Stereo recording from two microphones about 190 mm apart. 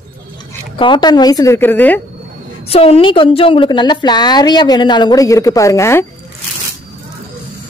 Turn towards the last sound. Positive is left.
turn(degrees=15)  # may be behind; listen again after turning